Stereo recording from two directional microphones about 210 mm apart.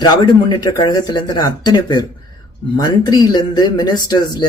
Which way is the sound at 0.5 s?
20° left (ahead or behind).